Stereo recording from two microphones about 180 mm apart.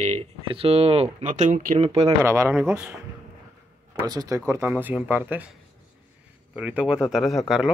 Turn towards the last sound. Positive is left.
turn(degrees=0)  # may be behind; listen again after turning